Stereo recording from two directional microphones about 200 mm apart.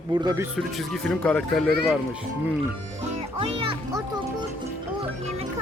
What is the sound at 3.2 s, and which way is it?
A child's voice, 30° right (ahead or behind).